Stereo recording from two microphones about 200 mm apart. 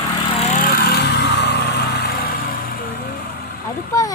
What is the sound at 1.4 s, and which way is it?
Vehicle, 55° left (ahead or behind).